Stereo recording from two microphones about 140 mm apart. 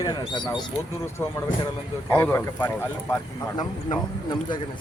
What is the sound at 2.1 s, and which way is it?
Speech, 15° left (ahead or behind).